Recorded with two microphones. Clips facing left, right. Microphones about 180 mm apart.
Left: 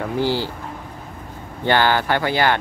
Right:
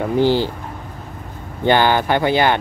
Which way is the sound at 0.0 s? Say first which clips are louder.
Right 5 dB; 20° right (ahead or behind).